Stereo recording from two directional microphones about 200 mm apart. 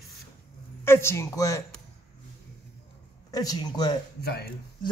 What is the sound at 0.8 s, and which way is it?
Speech, 15° left (ahead or behind).